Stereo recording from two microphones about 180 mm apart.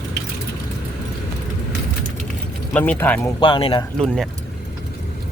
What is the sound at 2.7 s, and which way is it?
Speech, 10° left (ahead or behind).